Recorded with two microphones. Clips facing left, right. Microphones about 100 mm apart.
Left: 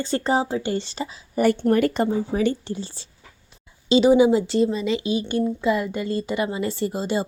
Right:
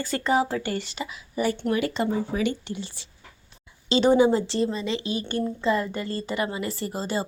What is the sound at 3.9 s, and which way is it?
A woman's voice, 10° left (ahead or behind).